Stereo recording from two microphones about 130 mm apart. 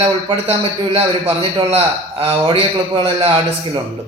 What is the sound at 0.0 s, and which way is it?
A man's voice, 45° right (ahead or behind).